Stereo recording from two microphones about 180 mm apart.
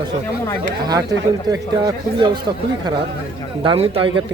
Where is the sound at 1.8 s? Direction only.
25° right (ahead or behind).